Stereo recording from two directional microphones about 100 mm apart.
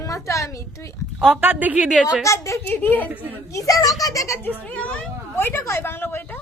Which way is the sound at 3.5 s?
35° left (ahead or behind).